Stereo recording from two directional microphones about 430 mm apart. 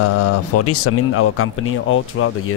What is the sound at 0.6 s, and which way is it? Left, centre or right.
Speech, left.